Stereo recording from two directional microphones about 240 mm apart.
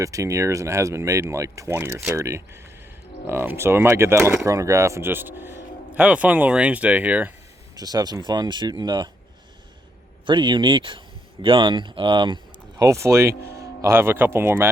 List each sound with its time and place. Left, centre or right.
0.0 s speech: centre
10.2 s speech: centre